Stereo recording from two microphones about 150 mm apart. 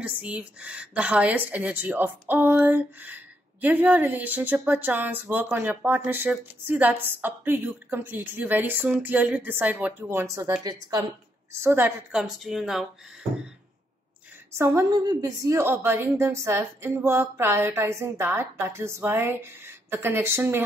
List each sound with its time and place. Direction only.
0.0 s a woman's voice: 10° right (ahead or behind); by 11.1 s 25° right (ahead or behind)
11.6 s speech: 15° right (ahead or behind)
14.6 s a woman's voice: 20° right (ahead or behind)